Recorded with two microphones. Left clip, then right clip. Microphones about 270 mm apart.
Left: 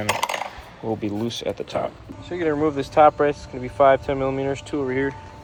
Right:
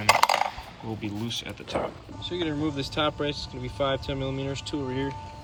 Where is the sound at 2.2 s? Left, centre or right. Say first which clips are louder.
Left 6 dB; centre.